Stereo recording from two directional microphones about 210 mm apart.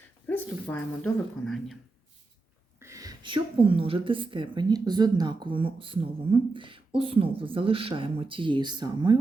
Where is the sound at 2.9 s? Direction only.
15° right (ahead or behind).